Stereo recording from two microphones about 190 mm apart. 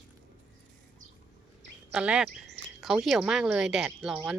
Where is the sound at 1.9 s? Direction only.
5° right (ahead or behind).